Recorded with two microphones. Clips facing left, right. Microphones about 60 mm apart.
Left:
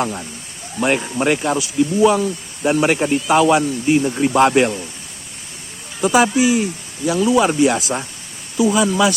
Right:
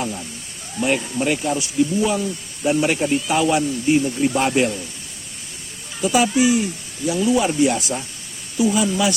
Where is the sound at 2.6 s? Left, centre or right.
Left.